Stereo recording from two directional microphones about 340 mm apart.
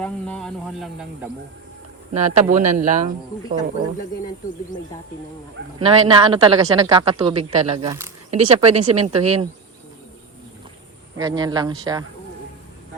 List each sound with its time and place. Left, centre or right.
0.0 s speech: centre
2.1 s a man's voice: centre
5.8 s a woman's voice: centre
8.3 s a woman's voice: centre
11.2 s a woman's voice: centre